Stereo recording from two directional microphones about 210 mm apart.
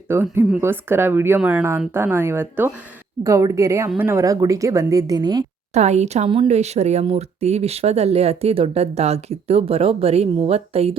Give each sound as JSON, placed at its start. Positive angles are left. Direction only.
{"t": 0.1, "sound": "a woman's voice", "side_deg": -10}
{"t": 5.7, "sound": "speech", "side_deg": -30}